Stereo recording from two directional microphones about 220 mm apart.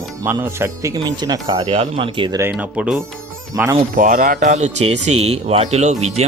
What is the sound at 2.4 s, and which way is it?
Speech, 5° right (ahead or behind).